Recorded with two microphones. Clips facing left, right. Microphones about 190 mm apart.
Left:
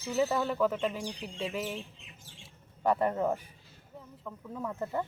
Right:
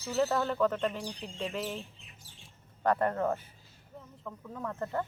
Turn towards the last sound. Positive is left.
turn(degrees=10)  # may be behind; listen again after turning